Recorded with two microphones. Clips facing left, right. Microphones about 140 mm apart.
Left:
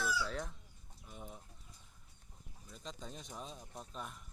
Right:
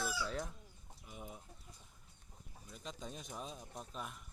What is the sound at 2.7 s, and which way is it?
Speech, 10° right (ahead or behind).